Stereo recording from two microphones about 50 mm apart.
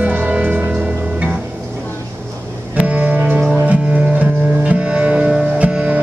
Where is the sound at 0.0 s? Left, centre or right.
Right.